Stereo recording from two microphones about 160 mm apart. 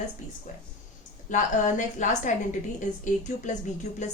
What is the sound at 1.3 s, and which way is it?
Speech, 50° left (ahead or behind).